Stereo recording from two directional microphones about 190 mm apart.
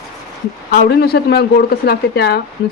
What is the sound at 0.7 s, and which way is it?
Speech, 60° left (ahead or behind).